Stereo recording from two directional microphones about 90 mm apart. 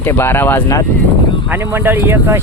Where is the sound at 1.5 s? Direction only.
25° right (ahead or behind).